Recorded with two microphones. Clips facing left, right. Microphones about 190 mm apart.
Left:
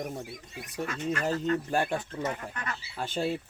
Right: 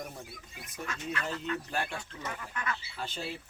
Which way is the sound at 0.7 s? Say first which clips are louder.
Left 6 dB; 55° left (ahead or behind).